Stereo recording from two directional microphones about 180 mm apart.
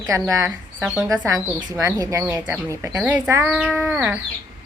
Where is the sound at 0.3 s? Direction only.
10° right (ahead or behind).